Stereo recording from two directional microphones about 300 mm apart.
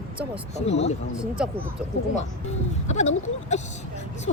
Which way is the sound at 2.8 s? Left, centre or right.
Left.